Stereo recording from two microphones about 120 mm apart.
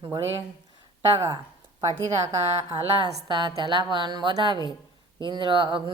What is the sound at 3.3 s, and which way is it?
A woman's voice, 40° right (ahead or behind).